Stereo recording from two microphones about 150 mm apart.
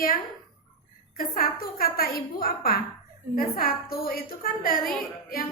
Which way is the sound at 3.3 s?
70° left (ahead or behind).